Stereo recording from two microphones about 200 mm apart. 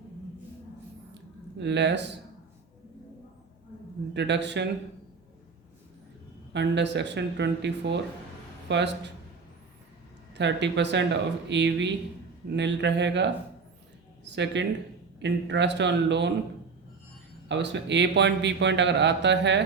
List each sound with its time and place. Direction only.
1.5 s a man's voice: 60° right (ahead or behind)
4.1 s a man's voice: 60° right (ahead or behind)
6.5 s a man's voice: 60° right (ahead or behind)
10.3 s a man's voice: 60° right (ahead or behind)
17.5 s a man's voice: 60° right (ahead or behind)